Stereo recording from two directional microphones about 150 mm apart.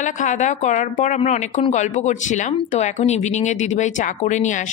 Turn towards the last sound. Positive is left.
turn(degrees=55)  # may be behind; listen again after turning